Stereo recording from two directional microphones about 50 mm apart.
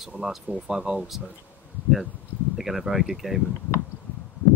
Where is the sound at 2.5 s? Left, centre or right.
Centre.